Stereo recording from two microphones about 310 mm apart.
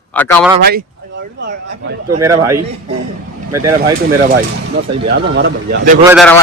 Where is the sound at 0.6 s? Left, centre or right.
Right.